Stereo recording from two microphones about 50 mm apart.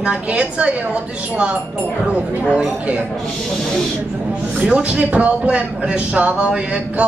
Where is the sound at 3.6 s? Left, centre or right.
Centre.